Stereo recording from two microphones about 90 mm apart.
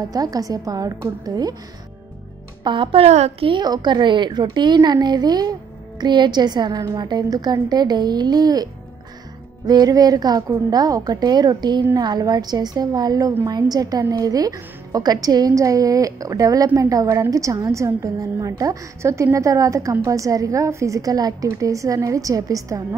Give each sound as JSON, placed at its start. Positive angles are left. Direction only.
{"t": 0.1, "sound": "a woman's voice", "side_deg": -45}
{"t": 2.6, "sound": "a woman's voice", "side_deg": -65}
{"t": 3.6, "sound": "a woman's voice", "side_deg": -50}
{"t": 9.7, "sound": "a woman's voice", "side_deg": -45}